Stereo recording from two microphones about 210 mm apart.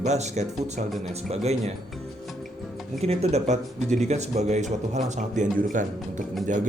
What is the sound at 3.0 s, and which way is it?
Speech, 30° right (ahead or behind).